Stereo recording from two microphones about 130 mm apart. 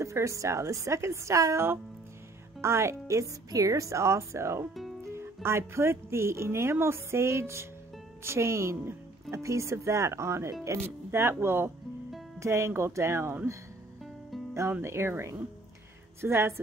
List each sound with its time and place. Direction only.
0.0 s speech: 25° right (ahead or behind)